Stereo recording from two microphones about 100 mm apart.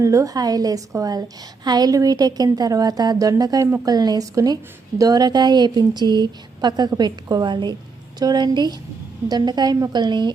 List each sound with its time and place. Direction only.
0.0 s a woman's voice: 35° right (ahead or behind); by 10.3 s 50° right (ahead or behind)